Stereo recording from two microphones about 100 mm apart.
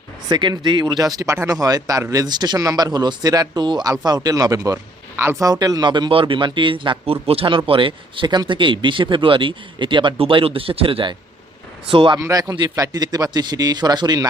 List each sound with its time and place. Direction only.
0.3 s a man's voice: 45° right (ahead or behind)
12.1 s a man's voice: 35° right (ahead or behind)